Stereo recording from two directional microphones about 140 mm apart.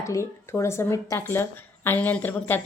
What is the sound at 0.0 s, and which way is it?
A woman's voice, 20° left (ahead or behind).